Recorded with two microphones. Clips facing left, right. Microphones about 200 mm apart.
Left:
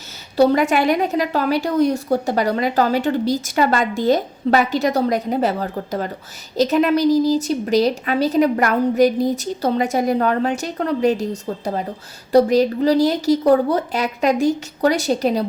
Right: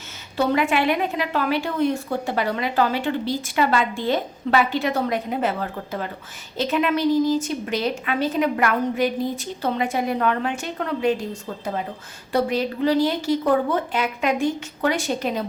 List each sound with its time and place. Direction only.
0.3 s a woman's voice: 40° left (ahead or behind)